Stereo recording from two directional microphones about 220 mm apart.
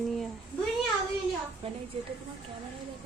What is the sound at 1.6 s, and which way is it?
Speech, 25° right (ahead or behind).